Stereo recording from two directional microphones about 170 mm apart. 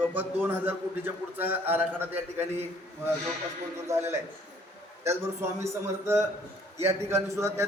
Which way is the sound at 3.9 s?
15° right (ahead or behind).